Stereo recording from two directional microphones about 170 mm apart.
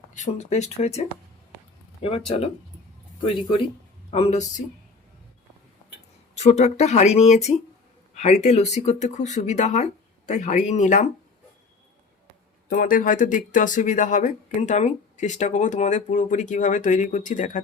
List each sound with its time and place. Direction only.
0.1 s speech: 45° left (ahead or behind)
4.1 s speech: 40° left (ahead or behind)
6.3 s speech: 40° left (ahead or behind)
12.6 s speech: 55° left (ahead or behind)